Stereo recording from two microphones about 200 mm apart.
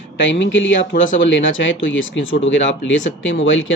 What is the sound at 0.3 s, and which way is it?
Speech, 70° left (ahead or behind).